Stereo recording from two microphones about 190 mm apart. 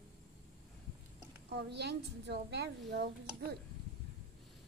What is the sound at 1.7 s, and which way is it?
A woman's voice, 65° right (ahead or behind).